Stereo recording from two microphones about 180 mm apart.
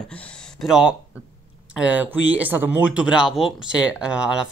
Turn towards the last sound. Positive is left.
turn(degrees=-5)  # may be behind; listen again after turning